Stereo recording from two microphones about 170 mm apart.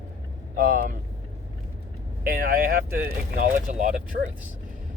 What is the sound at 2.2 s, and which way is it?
Speech, 60° right (ahead or behind).